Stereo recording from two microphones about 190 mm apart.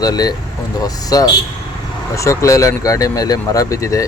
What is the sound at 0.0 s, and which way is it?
Speech, 20° left (ahead or behind).